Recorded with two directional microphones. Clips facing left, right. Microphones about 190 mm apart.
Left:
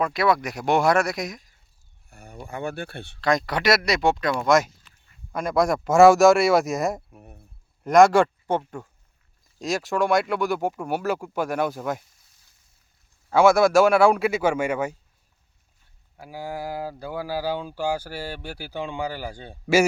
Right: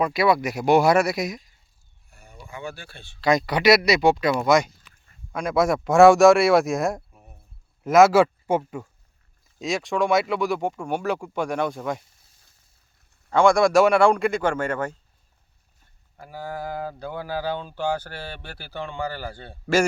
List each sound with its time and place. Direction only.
0.0 s speech: 5° right (ahead or behind)
2.0 s a sound: 50° left (ahead or behind)
3.2 s speech: centre (ahead or behind)
7.1 s a sound: 60° left (ahead or behind)
7.9 s speech: 5° right (ahead or behind)
13.3 s speech: 5° left (ahead or behind)
16.1 s speech: 10° left (ahead or behind)